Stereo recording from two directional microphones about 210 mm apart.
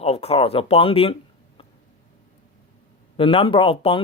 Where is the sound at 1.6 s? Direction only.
25° left (ahead or behind).